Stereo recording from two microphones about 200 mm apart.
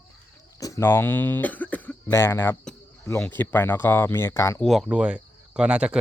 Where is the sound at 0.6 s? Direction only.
15° left (ahead or behind).